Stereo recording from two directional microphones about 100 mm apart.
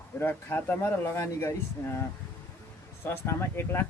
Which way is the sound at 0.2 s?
20° left (ahead or behind).